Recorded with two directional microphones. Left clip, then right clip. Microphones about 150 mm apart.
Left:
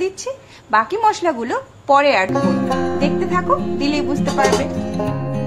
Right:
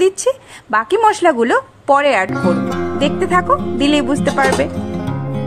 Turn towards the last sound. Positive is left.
turn(degrees=-50)  # may be behind; listen again after turning